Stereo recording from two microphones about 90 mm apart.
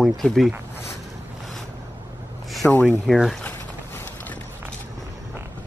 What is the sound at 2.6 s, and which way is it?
Speech, 15° left (ahead or behind).